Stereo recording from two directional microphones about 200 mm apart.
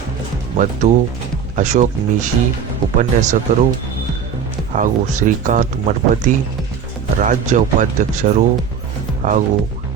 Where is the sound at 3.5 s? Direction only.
40° right (ahead or behind).